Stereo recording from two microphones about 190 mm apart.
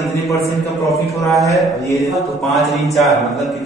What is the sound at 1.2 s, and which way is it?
A man's voice, centre (ahead or behind).